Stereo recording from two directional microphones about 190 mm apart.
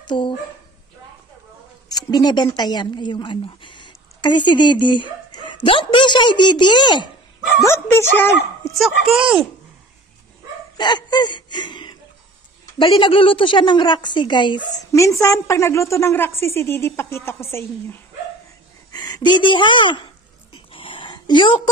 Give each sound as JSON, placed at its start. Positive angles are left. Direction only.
{"t": 0.1, "sound": "speech", "side_deg": 25}
{"t": 1.9, "sound": "a woman's voice", "side_deg": 20}
{"t": 7.6, "sound": "a woman's voice", "side_deg": 10}
{"t": 8.7, "sound": "a woman's voice", "side_deg": 0}
{"t": 10.8, "sound": "a woman's voice", "side_deg": 25}
{"t": 20.5, "sound": "a sound", "side_deg": 25}